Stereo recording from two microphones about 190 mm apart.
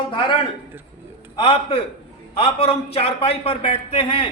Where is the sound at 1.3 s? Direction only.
30° left (ahead or behind).